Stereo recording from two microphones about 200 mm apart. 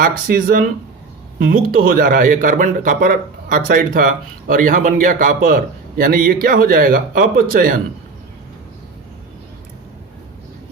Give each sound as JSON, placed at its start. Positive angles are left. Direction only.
{"t": 0.0, "sound": "speech", "side_deg": -45}